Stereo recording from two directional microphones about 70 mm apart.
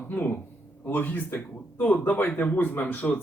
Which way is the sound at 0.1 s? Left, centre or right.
Left.